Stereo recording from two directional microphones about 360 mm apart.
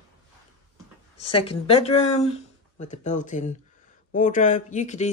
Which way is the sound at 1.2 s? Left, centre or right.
Centre.